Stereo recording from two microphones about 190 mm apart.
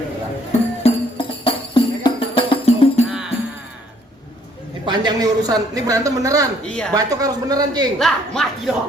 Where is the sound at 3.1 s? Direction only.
5° right (ahead or behind).